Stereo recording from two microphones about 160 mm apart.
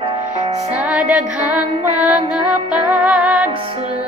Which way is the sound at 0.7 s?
5° right (ahead or behind).